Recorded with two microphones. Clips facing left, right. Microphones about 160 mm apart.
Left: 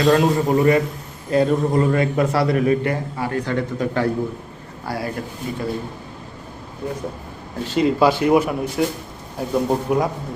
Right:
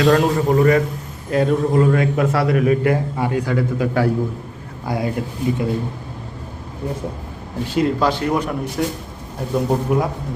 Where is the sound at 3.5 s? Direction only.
10° right (ahead or behind).